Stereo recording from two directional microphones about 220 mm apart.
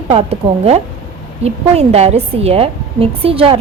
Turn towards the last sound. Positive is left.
turn(degrees=-25)  # may be behind; listen again after turning